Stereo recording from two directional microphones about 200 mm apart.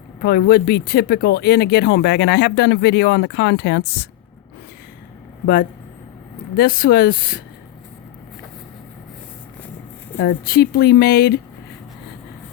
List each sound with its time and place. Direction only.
0.2 s speech: 55° left (ahead or behind)
6.6 s speech: 45° left (ahead or behind)
10.2 s speech: 55° left (ahead or behind)